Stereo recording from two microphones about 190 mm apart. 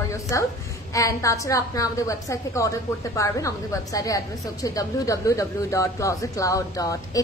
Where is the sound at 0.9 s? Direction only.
15° left (ahead or behind).